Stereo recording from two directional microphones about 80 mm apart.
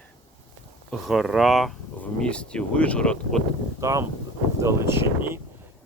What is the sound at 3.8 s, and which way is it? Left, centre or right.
Speech, right.